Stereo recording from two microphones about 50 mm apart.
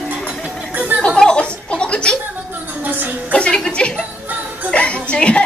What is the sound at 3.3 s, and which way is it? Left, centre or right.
A woman's voice, centre.